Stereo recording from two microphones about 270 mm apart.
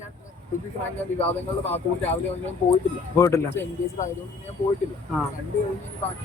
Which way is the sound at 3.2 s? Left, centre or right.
Centre.